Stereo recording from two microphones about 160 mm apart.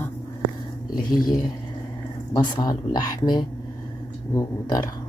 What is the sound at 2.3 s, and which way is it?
Speech, 25° left (ahead or behind).